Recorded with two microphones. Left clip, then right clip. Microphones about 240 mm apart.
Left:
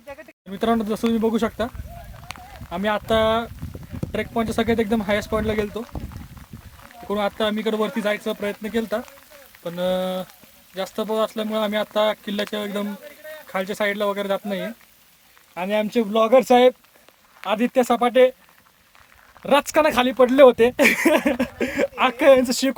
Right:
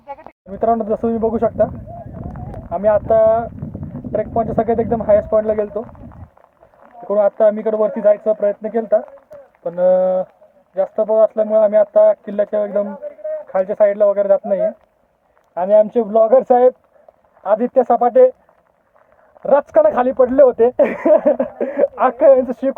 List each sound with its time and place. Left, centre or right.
0.5 s speech: centre
7.1 s speech: centre
19.4 s speech: centre